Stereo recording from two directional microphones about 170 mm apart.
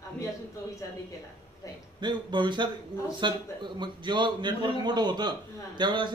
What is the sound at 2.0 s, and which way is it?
A man's voice, 25° right (ahead or behind).